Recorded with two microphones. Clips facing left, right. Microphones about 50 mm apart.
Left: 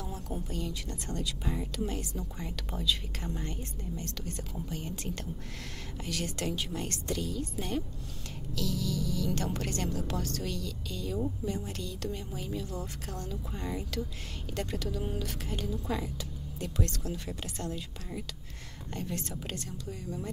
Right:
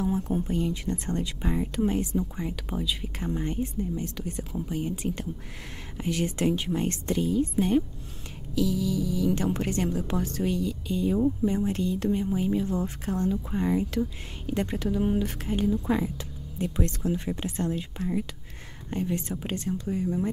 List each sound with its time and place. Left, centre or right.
0.0 s speech: right